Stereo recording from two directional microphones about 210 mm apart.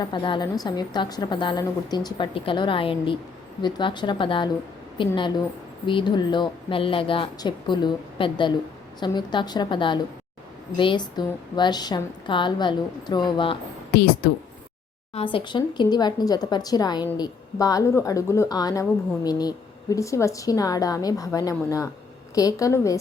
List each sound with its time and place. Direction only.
0.0 s a woman's voice: 20° left (ahead or behind)
15.1 s a woman's voice: 25° left (ahead or behind)